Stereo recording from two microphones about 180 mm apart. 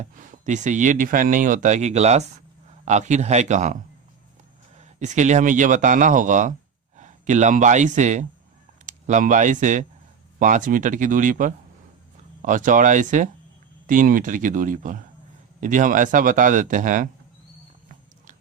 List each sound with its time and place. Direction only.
0.0 s a man's voice: 45° right (ahead or behind)
4.9 s speech: 40° right (ahead or behind)